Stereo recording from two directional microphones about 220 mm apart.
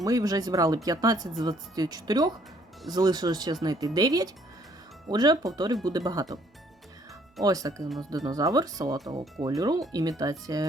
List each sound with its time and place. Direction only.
0.0 s speech: 15° right (ahead or behind)
7.4 s speech: 15° right (ahead or behind)